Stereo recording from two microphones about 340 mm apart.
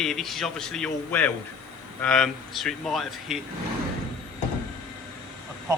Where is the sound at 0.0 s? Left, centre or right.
Centre.